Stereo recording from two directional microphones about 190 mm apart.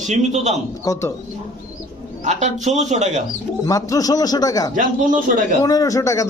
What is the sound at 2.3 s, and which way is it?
Speech, 40° right (ahead or behind).